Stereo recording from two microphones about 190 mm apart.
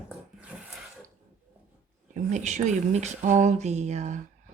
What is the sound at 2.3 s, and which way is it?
Speech, 40° right (ahead or behind).